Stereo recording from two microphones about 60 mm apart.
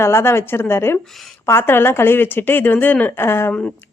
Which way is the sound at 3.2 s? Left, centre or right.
Left.